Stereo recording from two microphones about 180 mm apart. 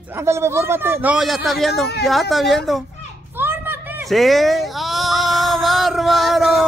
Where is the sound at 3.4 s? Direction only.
10° right (ahead or behind).